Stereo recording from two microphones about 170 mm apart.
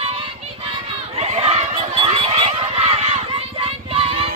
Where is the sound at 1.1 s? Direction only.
40° right (ahead or behind).